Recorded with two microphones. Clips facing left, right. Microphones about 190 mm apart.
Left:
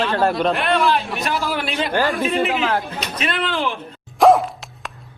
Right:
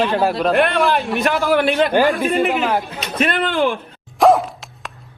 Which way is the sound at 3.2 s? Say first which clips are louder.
Right 6 dB; 50° right (ahead or behind).